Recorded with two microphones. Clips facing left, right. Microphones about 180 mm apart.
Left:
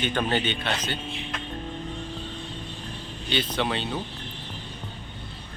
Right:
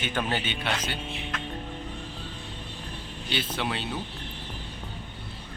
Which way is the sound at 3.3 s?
5° right (ahead or behind).